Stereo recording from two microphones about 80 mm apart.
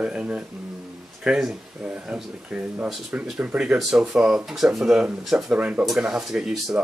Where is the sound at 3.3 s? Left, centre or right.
Centre.